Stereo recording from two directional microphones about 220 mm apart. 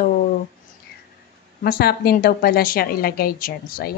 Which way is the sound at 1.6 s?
45° left (ahead or behind).